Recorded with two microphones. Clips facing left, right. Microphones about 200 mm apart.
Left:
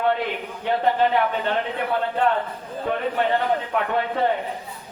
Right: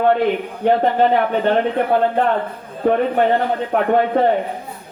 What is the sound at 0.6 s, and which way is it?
A man's voice, 45° right (ahead or behind).